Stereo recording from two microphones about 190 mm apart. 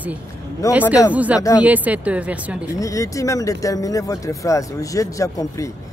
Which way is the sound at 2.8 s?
15° left (ahead or behind).